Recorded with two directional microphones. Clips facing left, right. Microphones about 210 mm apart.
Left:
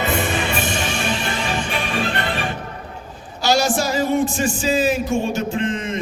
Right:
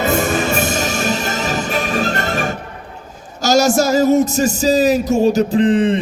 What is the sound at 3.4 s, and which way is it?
A man's voice, 45° right (ahead or behind).